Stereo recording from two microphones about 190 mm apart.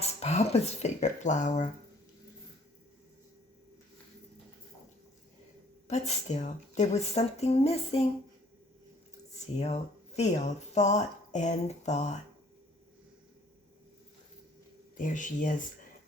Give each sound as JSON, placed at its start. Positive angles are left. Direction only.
{"t": 0.0, "sound": "speech", "side_deg": 35}
{"t": 5.9, "sound": "a woman's voice", "side_deg": 35}
{"t": 9.3, "sound": "speech", "side_deg": 35}
{"t": 14.9, "sound": "speech", "side_deg": 40}